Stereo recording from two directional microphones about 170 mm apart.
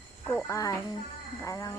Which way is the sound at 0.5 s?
20° left (ahead or behind).